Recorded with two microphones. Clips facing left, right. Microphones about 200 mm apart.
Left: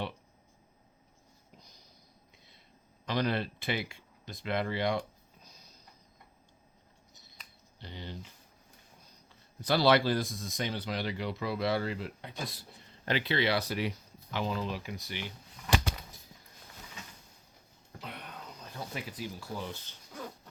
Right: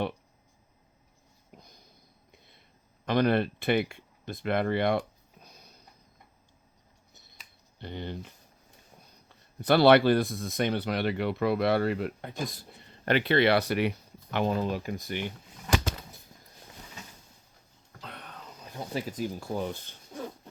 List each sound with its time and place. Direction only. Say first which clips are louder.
1.6 s a sound: right 3 dB; 55° right (ahead or behind)
3.1 s speech: right 7 dB; 55° right (ahead or behind)
7.8 s speech: right 7 dB; 55° right (ahead or behind)
9.6 s speech: right 6 dB; 60° right (ahead or behind)
13.1 s speech: right 7 dB; 60° right (ahead or behind)
18.9 s speech: right 10 dB; 45° right (ahead or behind)